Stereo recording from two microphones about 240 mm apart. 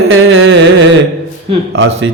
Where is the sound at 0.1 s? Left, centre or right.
Right.